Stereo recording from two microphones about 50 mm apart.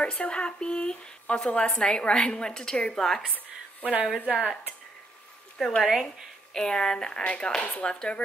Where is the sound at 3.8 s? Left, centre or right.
Right.